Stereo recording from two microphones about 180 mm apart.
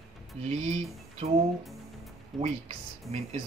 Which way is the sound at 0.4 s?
35° right (ahead or behind).